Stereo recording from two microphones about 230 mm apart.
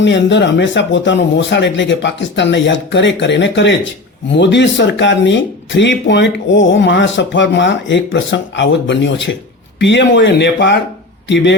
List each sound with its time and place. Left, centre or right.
0.0 s speech: left